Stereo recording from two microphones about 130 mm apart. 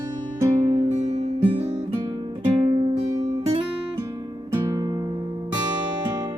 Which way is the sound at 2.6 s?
40° right (ahead or behind).